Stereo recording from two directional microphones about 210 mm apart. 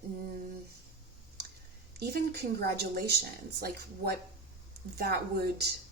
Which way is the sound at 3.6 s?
50° right (ahead or behind).